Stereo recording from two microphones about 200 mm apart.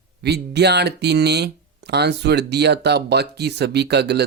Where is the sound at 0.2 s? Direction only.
55° right (ahead or behind).